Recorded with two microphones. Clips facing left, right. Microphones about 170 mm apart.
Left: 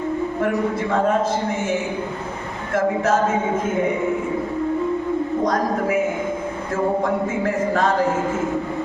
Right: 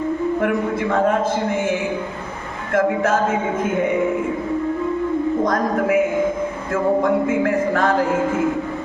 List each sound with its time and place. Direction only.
2.7 s music: 55° right (ahead or behind)
7.4 s music: 55° right (ahead or behind)